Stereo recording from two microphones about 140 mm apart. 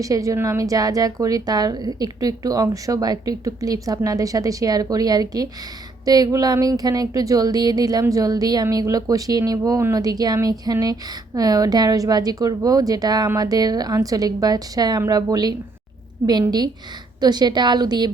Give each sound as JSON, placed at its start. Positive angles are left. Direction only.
{"t": 0.0, "sound": "a woman's voice", "side_deg": -25}